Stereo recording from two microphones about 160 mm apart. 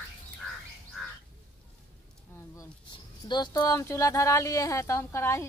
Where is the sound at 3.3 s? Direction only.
25° left (ahead or behind).